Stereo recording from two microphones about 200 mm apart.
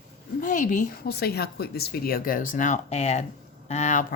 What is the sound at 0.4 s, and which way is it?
A woman's voice, 40° left (ahead or behind).